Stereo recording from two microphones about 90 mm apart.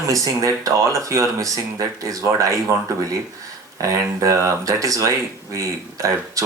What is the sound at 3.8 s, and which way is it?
Speech, 40° right (ahead or behind).